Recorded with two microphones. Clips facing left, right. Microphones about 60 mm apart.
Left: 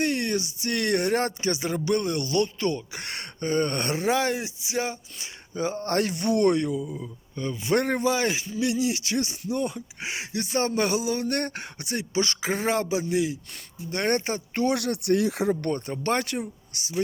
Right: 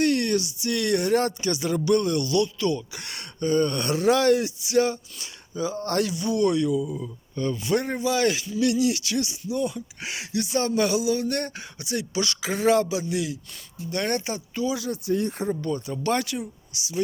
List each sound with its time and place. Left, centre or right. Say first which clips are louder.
0.0 s speech: right 3 dB; left
5.5 s speech: even; left
6.1 s speech: left 2 dB; left
7.3 s speech: right 4 dB; centre
7.8 s a man's voice: left 4 dB; left
8.0 s speech: right 1 dB; left
10.0 s speech: right 2 dB; left
12.1 s speech: left 4 dB; left
14.5 s speech: left 3 dB; left
15.7 s speech: right 1 dB; left